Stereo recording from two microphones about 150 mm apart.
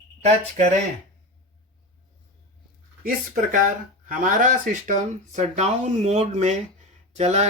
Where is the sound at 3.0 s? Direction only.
70° right (ahead or behind).